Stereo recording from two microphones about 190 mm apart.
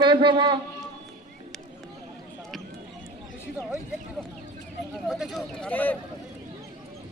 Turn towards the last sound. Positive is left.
turn(degrees=10)  # may be behind; listen again after turning